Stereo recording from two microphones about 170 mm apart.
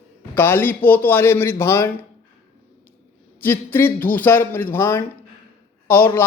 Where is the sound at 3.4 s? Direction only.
15° left (ahead or behind).